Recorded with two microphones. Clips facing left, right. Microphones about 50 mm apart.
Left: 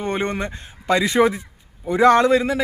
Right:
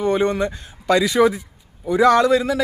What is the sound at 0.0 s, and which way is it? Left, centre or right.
A man's voice, left.